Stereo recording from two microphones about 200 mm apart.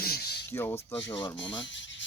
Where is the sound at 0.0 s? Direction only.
50° left (ahead or behind).